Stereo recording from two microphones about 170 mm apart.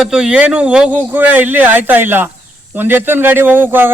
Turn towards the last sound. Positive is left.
turn(degrees=-10)  # may be behind; listen again after turning